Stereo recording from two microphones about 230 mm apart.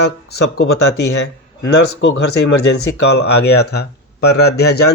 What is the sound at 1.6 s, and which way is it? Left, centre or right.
Speech, left.